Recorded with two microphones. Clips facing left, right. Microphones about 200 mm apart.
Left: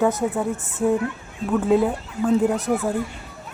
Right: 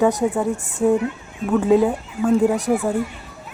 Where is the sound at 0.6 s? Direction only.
15° right (ahead or behind).